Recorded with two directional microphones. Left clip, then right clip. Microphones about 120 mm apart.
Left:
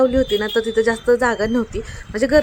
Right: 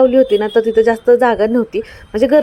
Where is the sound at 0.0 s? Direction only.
20° right (ahead or behind).